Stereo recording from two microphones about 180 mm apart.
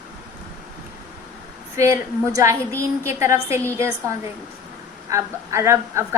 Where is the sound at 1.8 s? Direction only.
15° right (ahead or behind).